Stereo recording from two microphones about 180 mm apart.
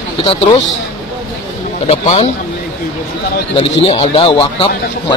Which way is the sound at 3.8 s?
35° left (ahead or behind).